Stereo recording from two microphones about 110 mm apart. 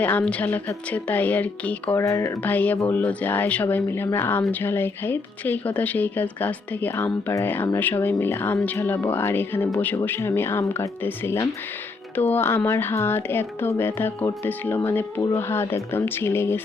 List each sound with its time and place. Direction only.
0.0 s speech: 15° left (ahead or behind)
2.0 s speech: 25° left (ahead or behind)
2.4 s speech: 15° left (ahead or behind)